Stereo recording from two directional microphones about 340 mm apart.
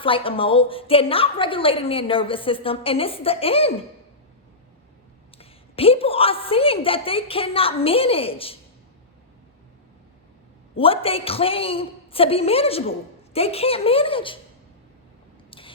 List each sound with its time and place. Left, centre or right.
0.0 s a woman's voice: centre
5.4 s a woman's voice: centre
10.8 s a woman's voice: centre
15.4 s a sound: centre